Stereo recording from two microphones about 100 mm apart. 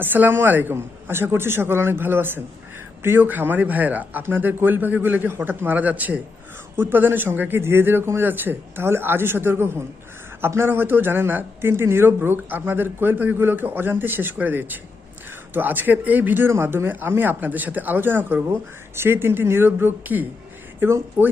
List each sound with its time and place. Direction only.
0.0 s speech: 20° right (ahead or behind)